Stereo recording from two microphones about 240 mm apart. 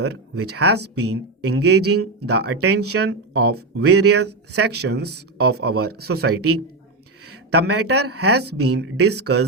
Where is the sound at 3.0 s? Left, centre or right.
Right.